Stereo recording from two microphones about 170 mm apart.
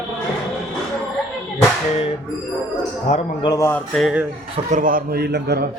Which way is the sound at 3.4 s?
20° left (ahead or behind).